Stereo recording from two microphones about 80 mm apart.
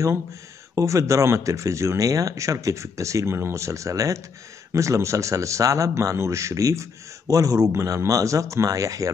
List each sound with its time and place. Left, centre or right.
0.7 s a man's voice: right